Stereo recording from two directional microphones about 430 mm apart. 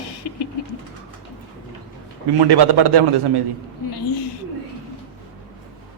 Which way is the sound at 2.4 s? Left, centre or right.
Right.